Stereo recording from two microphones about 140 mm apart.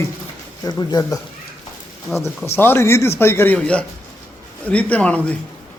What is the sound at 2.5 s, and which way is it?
Speech, 15° left (ahead or behind).